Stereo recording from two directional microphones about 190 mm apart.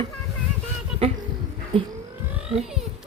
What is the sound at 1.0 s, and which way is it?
Speech, 30° right (ahead or behind).